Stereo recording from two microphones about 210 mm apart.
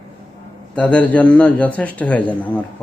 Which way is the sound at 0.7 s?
5° left (ahead or behind).